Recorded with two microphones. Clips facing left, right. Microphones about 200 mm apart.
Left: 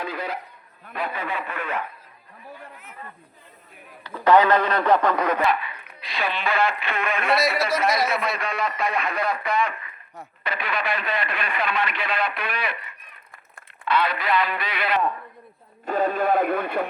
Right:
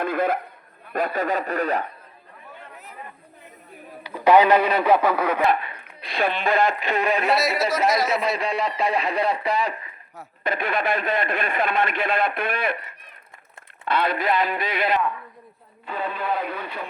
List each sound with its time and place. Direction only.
0.0 s a man's voice: 50° right (ahead or behind)
4.0 s speech: 10° right (ahead or behind)
5.5 s speech: 50° right (ahead or behind)
7.3 s speech: centre (ahead or behind)
8.4 s speech: 30° right (ahead or behind)
10.4 s speech: 50° right (ahead or behind)
15.9 s speech: 45° left (ahead or behind)